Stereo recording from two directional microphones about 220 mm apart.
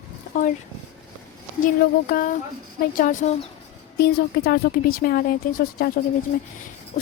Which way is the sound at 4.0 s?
45° left (ahead or behind).